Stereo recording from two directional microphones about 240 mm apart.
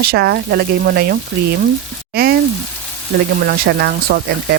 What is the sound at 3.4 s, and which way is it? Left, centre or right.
Speech, right.